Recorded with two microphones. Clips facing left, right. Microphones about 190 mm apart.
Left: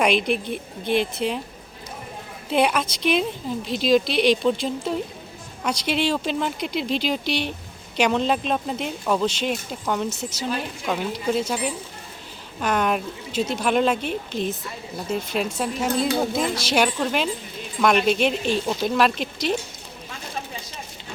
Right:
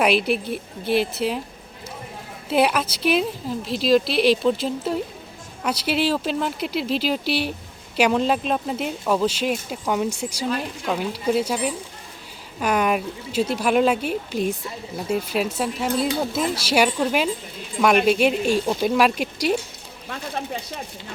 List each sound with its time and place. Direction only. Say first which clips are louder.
0.0 s a woman's voice: right 1 dB; 5° right (ahead or behind)
2.5 s a woman's voice: right 1 dB; 5° right (ahead or behind)
20.1 s a sound: right 5 dB; 60° right (ahead or behind)